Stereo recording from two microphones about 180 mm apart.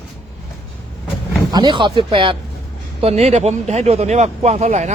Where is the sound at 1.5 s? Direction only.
20° right (ahead or behind).